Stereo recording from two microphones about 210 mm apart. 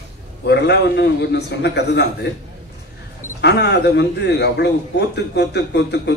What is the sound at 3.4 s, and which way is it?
A man's voice, 55° left (ahead or behind).